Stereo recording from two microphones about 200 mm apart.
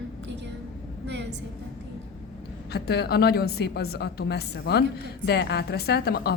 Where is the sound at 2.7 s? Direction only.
55° left (ahead or behind).